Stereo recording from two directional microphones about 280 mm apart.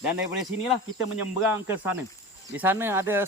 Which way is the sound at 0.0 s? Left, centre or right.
Centre.